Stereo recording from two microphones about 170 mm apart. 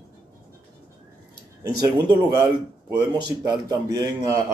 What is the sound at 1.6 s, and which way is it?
A man's voice, 25° right (ahead or behind).